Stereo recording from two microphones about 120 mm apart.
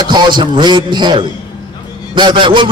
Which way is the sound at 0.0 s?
40° right (ahead or behind).